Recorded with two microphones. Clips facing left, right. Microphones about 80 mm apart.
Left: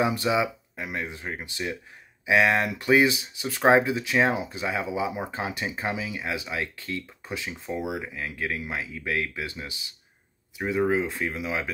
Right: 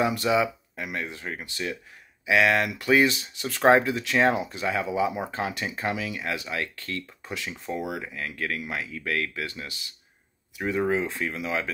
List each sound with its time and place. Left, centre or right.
0.0 s speech: centre
10.9 s speech: centre